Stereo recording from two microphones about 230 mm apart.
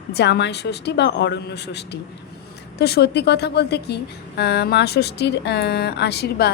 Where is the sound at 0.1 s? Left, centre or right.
Left.